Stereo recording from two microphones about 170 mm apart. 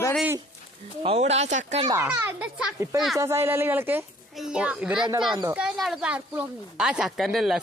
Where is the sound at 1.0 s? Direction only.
35° right (ahead or behind).